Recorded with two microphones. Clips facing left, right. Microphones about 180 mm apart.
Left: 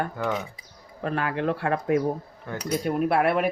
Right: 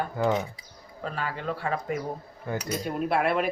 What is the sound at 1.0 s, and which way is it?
Speech, 65° left (ahead or behind).